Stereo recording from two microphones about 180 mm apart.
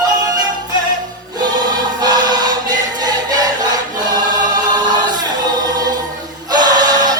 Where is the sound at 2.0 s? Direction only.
20° right (ahead or behind).